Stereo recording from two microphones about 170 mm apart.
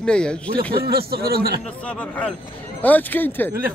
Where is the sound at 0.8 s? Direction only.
65° right (ahead or behind).